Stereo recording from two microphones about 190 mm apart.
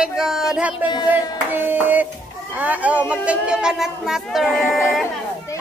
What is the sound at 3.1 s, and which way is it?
Speech, 5° right (ahead or behind).